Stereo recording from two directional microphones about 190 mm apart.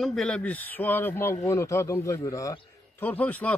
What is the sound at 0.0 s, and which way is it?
A man's voice, centre (ahead or behind).